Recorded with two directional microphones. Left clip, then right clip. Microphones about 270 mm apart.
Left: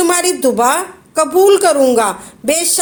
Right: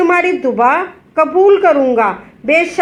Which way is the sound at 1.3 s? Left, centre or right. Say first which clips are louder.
Even; left.